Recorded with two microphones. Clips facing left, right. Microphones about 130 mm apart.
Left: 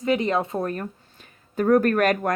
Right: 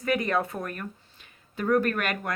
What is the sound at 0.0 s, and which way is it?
Speech, 25° left (ahead or behind).